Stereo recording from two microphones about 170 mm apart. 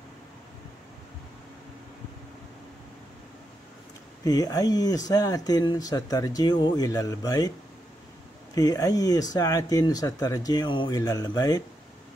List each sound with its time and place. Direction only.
4.2 s speech: 20° left (ahead or behind)
8.5 s speech: 20° left (ahead or behind)